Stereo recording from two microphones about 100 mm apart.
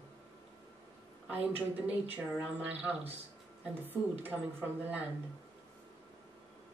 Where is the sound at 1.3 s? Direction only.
15° right (ahead or behind).